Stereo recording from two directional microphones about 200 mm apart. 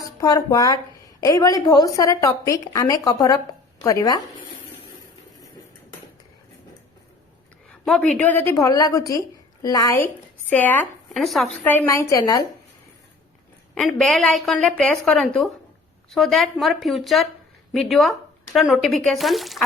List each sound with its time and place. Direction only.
0.2 s a woman's voice: 20° left (ahead or behind)
7.7 s a woman's voice: 5° left (ahead or behind)
13.7 s speech: 5° left (ahead or behind)